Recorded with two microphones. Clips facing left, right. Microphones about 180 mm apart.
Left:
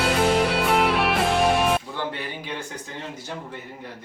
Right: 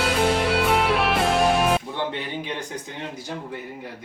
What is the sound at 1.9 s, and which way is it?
Speech, 20° right (ahead or behind).